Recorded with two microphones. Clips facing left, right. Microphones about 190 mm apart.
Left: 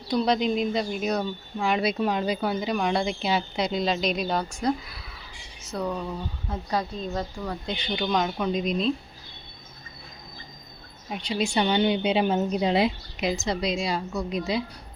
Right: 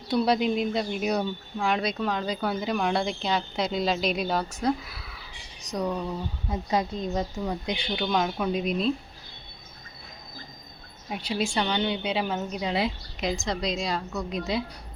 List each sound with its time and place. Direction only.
0.1 s a woman's voice: 5° right (ahead or behind)
1.5 s speech: 5° left (ahead or behind)
5.7 s a woman's voice: 10° right (ahead or behind)
7.9 s speech: 5° right (ahead or behind)
11.1 s speech: 5° right (ahead or behind)
11.5 s a woman's voice: 15° left (ahead or behind); by 12.8 s 30° left (ahead or behind)
13.1 s speech: 5° left (ahead or behind)